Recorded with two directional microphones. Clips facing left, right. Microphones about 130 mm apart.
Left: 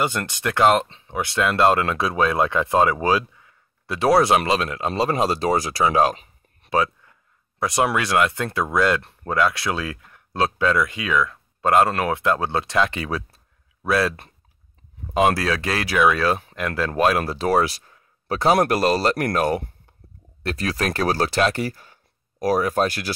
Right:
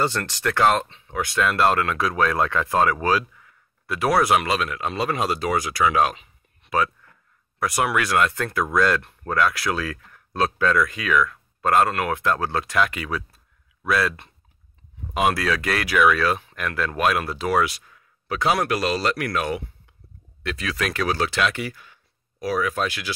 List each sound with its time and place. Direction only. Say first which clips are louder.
0.0 s speech: even; 15° left (ahead or behind)
0.8 s a sound: left 1 dB; 35° left (ahead or behind)
1.1 s speech: left 1 dB; 25° left (ahead or behind); by 6.7 s 40° left (ahead or behind)
6.7 s speech: left 2 dB; 25° left (ahead or behind)
15.1 s speech: left 3 dB; 30° left (ahead or behind)